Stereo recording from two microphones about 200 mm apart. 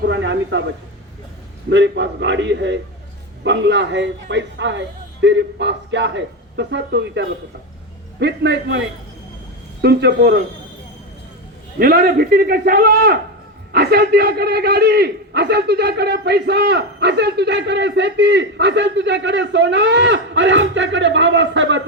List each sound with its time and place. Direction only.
0.0 s a sound: 65° right (ahead or behind)
1.7 s a man's voice: 65° right (ahead or behind)
9.8 s a man's voice: 55° right (ahead or behind)
11.8 s a man's voice: 50° right (ahead or behind); by 21.8 s 65° right (ahead or behind)